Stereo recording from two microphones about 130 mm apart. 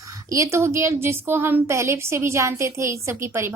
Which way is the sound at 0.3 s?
20° right (ahead or behind).